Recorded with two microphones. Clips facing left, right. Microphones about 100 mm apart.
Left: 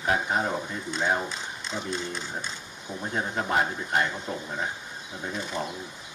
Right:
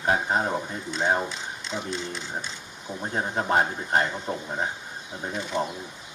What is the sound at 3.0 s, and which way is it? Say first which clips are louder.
A man's voice: right 2 dB; 35° right (ahead or behind).